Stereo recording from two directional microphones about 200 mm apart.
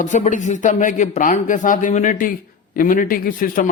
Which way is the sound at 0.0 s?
40° left (ahead or behind).